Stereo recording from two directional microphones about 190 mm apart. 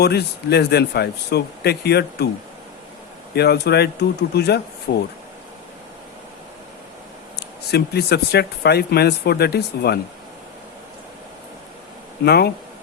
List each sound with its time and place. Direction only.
0.0 s speech: 60° left (ahead or behind)
3.3 s speech: 60° left (ahead or behind)
7.3 s speech: 60° left (ahead or behind)
12.2 s speech: 55° left (ahead or behind)